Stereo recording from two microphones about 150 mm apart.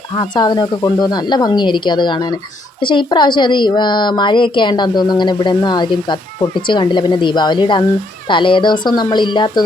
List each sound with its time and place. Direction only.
0.2 s a woman's voice: 30° left (ahead or behind)